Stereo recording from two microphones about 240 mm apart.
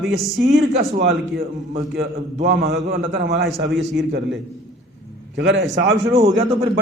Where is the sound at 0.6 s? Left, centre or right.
Right.